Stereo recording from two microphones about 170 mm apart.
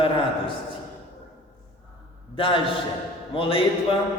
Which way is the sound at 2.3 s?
30° left (ahead or behind).